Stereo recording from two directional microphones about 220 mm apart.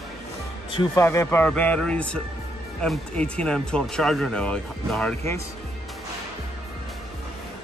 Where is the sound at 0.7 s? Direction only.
20° left (ahead or behind).